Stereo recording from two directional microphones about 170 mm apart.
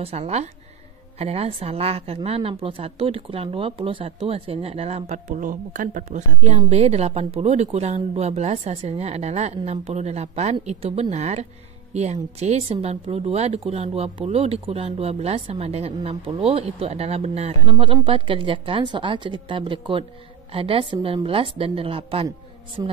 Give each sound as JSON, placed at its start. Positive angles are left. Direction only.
{"t": 0.0, "sound": "a woman's voice", "side_deg": -35}